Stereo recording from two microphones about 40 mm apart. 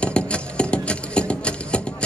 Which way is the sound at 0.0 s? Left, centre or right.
Left.